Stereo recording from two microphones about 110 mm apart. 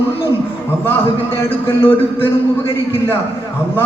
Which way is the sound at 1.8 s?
20° left (ahead or behind).